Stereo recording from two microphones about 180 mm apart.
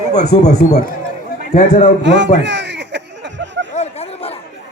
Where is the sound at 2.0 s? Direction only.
80° right.